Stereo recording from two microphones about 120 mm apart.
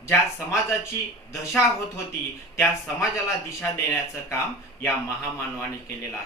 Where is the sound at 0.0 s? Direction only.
25° left (ahead or behind).